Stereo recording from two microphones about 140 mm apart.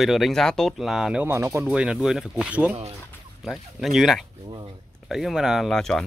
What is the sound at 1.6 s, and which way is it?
Speech, 5° right (ahead or behind).